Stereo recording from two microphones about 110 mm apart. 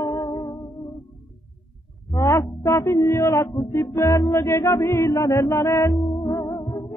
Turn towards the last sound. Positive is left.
turn(degrees=35)  # may be behind; listen again after turning